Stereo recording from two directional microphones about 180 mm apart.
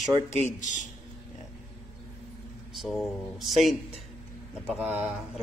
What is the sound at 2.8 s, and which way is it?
Speech, centre (ahead or behind).